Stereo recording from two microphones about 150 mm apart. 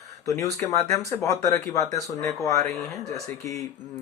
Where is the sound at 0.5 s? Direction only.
20° left (ahead or behind).